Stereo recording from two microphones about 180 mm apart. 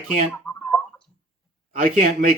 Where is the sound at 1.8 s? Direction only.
45° right (ahead or behind).